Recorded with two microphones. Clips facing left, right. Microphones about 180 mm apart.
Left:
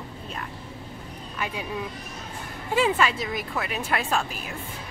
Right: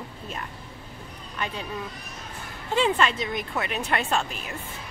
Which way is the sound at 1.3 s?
5° left (ahead or behind).